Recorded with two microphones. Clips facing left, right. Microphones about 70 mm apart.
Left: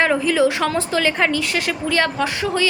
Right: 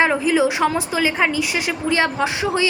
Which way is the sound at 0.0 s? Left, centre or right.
Centre.